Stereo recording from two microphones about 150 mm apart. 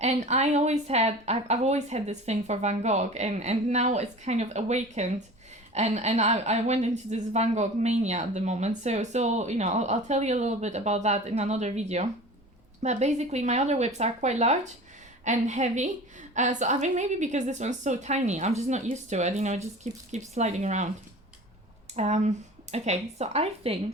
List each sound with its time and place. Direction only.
0.0 s a woman's voice: 50° right (ahead or behind)
21.9 s a woman's voice: 50° right (ahead or behind)